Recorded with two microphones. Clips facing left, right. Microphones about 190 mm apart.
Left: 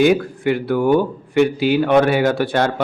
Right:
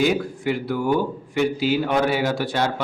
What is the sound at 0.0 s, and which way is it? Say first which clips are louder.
A man's voice: left 6 dB; 60° left (ahead or behind).